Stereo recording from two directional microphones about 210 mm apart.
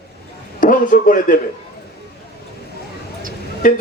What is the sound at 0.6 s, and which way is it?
Speech, 40° left (ahead or behind).